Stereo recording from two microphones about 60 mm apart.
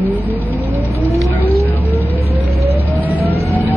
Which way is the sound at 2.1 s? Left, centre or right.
Right.